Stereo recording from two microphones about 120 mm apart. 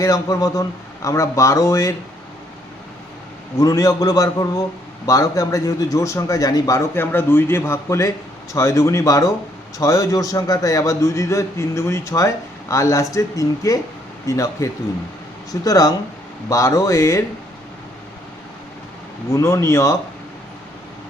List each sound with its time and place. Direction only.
0.0 s a man's voice: 30° left (ahead or behind)
3.6 s a man's voice: 30° left (ahead or behind)
19.3 s a man's voice: 25° left (ahead or behind)